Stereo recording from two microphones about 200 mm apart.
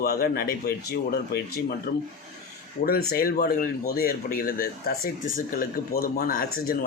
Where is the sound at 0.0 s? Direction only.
50° left (ahead or behind).